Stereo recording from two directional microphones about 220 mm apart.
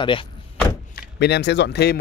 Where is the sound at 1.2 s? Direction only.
50° left (ahead or behind).